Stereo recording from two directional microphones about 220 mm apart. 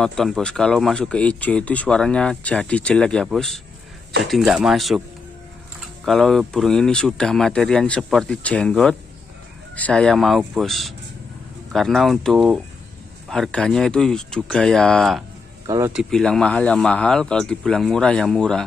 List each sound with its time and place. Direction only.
0.0 s speech: centre (ahead or behind)
6.0 s speech: centre (ahead or behind)
15.6 s speech: 15° right (ahead or behind)
15.9 s speech: centre (ahead or behind)